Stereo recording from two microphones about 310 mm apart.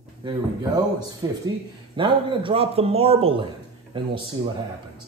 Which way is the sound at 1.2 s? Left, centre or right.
Centre.